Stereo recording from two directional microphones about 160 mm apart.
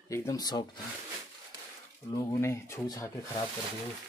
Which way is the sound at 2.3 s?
15° left (ahead or behind).